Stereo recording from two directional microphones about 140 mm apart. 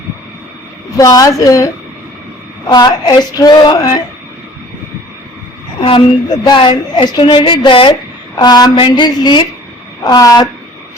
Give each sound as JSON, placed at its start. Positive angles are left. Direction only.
{"t": 0.9, "sound": "female singing", "side_deg": 25}
{"t": 5.8, "sound": "a woman's voice", "side_deg": 35}
{"t": 8.4, "sound": "female singing", "side_deg": 30}